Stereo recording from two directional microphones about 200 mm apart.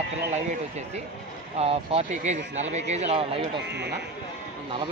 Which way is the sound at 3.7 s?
60° right (ahead or behind).